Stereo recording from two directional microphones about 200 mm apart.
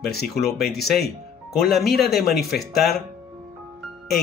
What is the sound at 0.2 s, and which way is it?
Speech, centre (ahead or behind).